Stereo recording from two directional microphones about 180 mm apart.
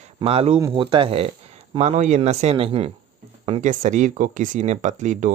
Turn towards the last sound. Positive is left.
turn(degrees=-45)  # may be behind; listen again after turning